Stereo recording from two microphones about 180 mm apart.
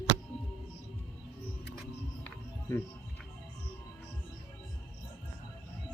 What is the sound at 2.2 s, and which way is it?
Music, 10° left (ahead or behind).